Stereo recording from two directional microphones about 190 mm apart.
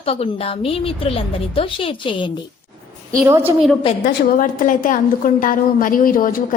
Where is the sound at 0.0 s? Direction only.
30° left (ahead or behind).